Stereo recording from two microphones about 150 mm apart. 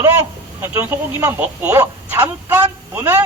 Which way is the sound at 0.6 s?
15° right (ahead or behind).